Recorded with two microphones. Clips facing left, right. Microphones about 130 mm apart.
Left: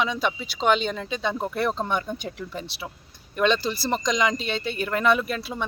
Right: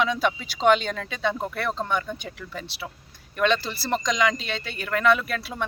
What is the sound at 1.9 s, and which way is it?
Speech, 25° left (ahead or behind).